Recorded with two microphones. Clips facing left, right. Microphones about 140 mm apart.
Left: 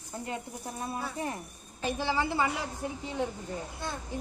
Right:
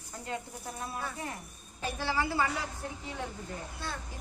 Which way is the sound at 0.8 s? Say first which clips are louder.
Left 4 dB; 25° left (ahead or behind).